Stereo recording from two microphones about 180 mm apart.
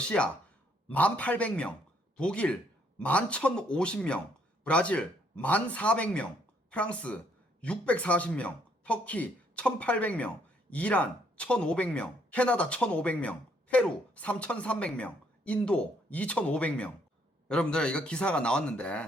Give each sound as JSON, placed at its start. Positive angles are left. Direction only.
{"t": 0.0, "sound": "a man's voice", "side_deg": 5}